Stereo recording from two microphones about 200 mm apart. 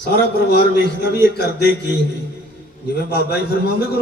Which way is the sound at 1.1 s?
50° right (ahead or behind).